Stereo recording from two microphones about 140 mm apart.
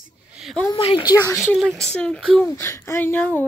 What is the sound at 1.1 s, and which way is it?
Speech, 25° left (ahead or behind).